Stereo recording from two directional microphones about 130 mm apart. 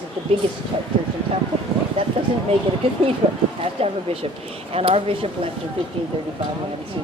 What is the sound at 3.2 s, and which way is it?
Speech, 45° right (ahead or behind).